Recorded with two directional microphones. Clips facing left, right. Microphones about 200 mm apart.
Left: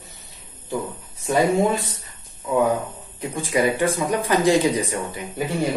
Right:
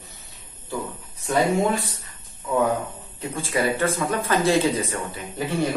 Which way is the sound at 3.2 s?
15° left (ahead or behind).